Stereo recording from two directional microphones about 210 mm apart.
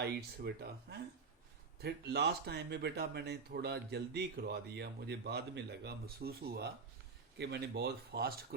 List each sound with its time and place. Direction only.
0.0 s speech: 50° right (ahead or behind)